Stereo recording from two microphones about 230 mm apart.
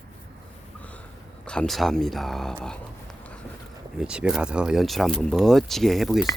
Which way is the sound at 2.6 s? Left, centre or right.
Centre.